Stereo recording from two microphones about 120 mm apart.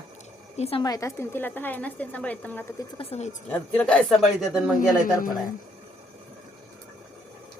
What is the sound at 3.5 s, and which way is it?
Speech, 10° left (ahead or behind).